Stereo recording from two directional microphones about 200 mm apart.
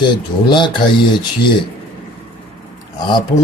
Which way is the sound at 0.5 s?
25° left (ahead or behind).